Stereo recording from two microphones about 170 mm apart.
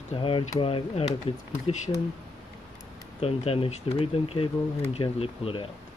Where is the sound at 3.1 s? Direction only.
35° left (ahead or behind).